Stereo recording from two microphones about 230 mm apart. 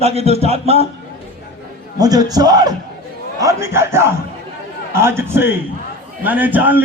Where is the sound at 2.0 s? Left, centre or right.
Centre.